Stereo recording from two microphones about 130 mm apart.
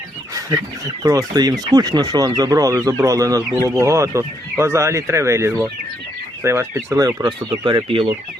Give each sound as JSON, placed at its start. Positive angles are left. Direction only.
{"t": 1.0, "sound": "speech", "side_deg": -30}
{"t": 7.3, "sound": "speech", "side_deg": -40}